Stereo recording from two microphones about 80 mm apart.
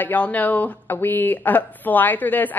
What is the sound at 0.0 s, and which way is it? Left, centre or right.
Speech, left.